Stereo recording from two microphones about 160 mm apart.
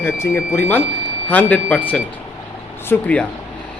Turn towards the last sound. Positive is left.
turn(degrees=10)  # may be behind; listen again after turning